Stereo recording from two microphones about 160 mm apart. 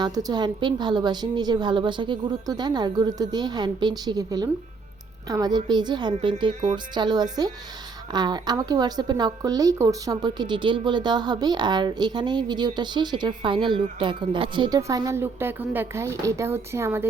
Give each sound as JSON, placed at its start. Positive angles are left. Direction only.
{"t": 0.0, "sound": "a woman's voice", "side_deg": -25}